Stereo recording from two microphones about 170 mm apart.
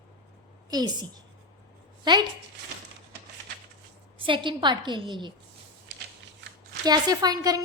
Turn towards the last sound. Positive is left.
turn(degrees=-20)  # may be behind; listen again after turning